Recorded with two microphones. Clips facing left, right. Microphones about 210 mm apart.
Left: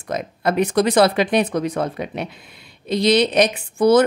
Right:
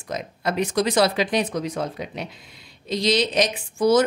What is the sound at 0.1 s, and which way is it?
Speech, 55° left (ahead or behind).